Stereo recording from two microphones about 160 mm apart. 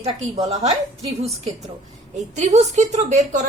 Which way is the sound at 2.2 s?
45° right (ahead or behind).